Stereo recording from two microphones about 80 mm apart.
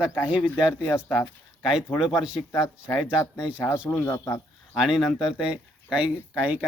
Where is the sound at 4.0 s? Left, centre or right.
Left.